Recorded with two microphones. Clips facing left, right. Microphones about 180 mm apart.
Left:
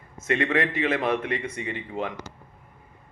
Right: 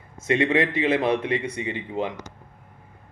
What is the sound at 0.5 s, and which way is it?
Speech, 30° right (ahead or behind).